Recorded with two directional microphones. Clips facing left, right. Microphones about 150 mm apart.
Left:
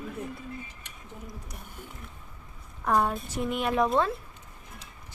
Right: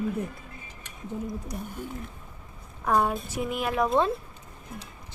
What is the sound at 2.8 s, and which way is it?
A woman's voice, 5° right (ahead or behind).